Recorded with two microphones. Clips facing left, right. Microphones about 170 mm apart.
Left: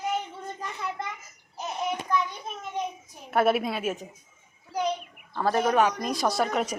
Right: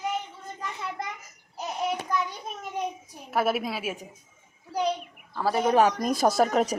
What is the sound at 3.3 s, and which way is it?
Speech, centre (ahead or behind).